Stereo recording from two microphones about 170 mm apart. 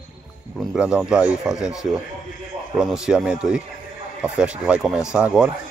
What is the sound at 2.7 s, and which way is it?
Speech, 5° right (ahead or behind).